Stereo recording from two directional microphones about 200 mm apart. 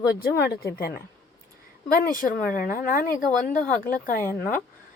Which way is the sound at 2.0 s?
45° left (ahead or behind).